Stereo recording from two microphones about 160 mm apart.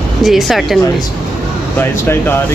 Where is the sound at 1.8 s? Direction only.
15° left (ahead or behind).